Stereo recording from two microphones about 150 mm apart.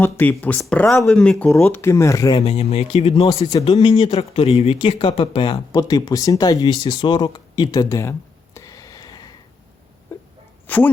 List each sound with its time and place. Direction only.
0.0 s speech: 10° left (ahead or behind)
1.7 s speech: 15° left (ahead or behind)
2.4 s speech: 45° left (ahead or behind); by 8.1 s 20° left (ahead or behind)
8.5 s a sound: 20° left (ahead or behind)
10.7 s speech: 10° left (ahead or behind)